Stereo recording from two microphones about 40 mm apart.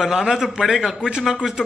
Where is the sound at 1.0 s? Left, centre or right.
Right.